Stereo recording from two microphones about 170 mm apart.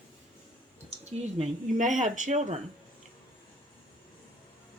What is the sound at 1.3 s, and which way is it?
Speech, 45° right (ahead or behind).